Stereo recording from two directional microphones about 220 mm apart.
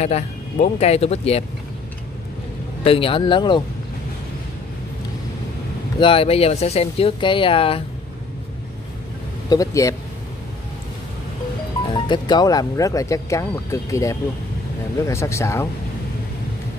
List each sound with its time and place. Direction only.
0.0 s speech: 30° left (ahead or behind)
2.8 s speech: 25° left (ahead or behind)
5.9 s speech: 25° left (ahead or behind)
9.5 s speech: 15° left (ahead or behind)
11.9 s speech: 20° left (ahead or behind)